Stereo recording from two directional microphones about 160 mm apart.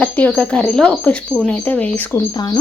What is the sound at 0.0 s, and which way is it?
Speech, 5° left (ahead or behind).